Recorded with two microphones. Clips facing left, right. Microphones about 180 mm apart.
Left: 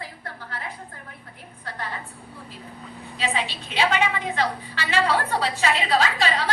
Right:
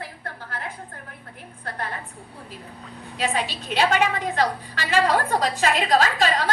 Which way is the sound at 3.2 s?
45° right (ahead or behind).